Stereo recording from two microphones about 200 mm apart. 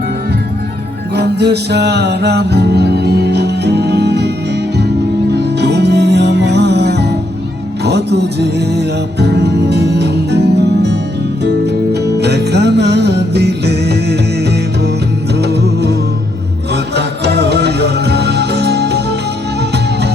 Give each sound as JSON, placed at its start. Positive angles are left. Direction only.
{"t": 1.1, "sound": "music", "side_deg": -55}
{"t": 5.5, "sound": "music", "side_deg": -55}
{"t": 15.4, "sound": "music", "side_deg": -55}